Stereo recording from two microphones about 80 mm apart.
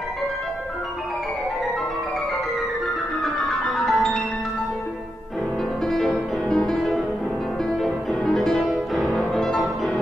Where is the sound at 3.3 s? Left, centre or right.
Centre.